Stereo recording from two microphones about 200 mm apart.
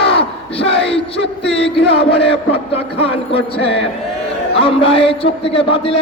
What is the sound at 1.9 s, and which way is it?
A man's voice, 30° left (ahead or behind).